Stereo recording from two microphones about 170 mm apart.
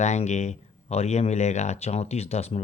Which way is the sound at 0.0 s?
40° left (ahead or behind).